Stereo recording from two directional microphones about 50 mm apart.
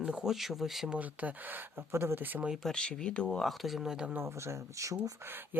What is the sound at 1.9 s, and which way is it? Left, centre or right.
Speech, right.